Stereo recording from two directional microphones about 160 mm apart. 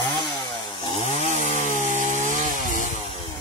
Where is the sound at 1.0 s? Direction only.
45° left (ahead or behind).